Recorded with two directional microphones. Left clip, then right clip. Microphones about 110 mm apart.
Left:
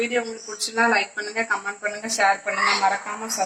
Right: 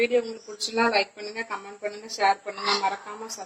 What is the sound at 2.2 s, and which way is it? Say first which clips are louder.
A woman's voice: left 3 dB; 25° left (ahead or behind).